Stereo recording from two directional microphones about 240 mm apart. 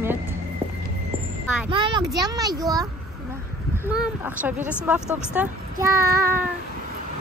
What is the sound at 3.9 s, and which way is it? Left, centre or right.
A child's voice, centre.